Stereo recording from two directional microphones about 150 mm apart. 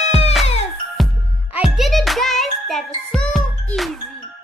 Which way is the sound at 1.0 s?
Centre (ahead or behind).